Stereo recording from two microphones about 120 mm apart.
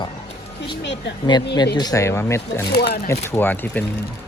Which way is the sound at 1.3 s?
35° left (ahead or behind).